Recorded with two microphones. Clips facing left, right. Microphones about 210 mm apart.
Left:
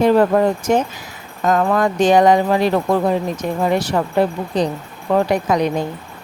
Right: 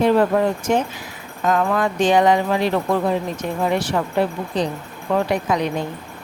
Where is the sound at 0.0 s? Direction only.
40° left (ahead or behind).